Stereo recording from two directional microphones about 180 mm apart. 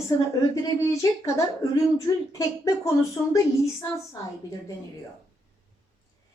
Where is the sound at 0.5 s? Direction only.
20° left (ahead or behind).